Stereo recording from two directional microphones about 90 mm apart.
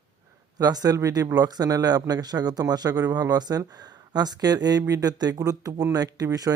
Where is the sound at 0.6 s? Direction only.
45° right (ahead or behind).